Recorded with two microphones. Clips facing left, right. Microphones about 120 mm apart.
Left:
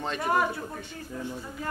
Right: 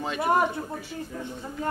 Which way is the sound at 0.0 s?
5° right (ahead or behind).